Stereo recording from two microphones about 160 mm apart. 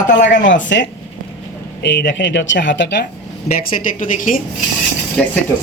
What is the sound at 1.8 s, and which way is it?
Speech, 90° left.